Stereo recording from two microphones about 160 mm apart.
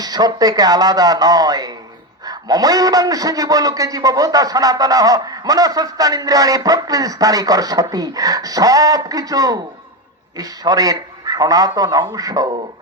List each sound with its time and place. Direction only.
0.0 s a man's voice: 25° right (ahead or behind)